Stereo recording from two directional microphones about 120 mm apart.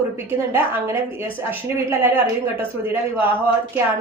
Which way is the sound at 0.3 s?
20° right (ahead or behind).